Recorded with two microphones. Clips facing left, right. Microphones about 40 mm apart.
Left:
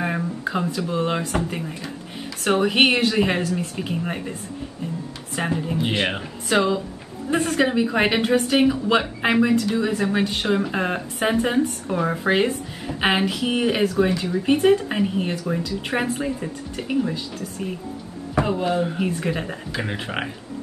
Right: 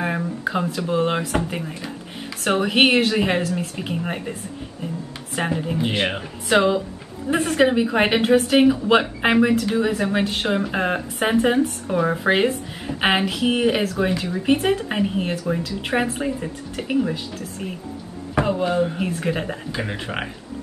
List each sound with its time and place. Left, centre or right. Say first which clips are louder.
0.0 s speech: right 1 dB; centre
5.8 s speech: even; centre
6.5 s speech: right 3 dB; centre
18.4 s speech: right 2 dB; centre